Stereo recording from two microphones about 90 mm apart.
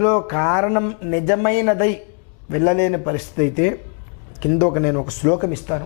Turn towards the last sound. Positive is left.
turn(degrees=15)  # may be behind; listen again after turning